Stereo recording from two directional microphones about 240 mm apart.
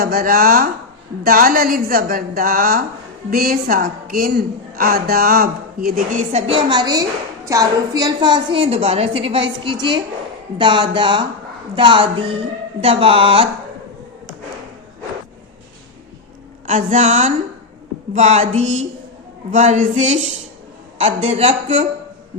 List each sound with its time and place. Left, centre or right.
0.0 s a woman's voice: right
16.6 s a woman's voice: right